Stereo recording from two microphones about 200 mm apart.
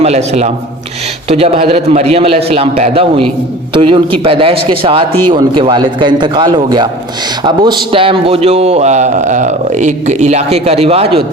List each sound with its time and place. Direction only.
0.0 s a man's voice: 30° right (ahead or behind)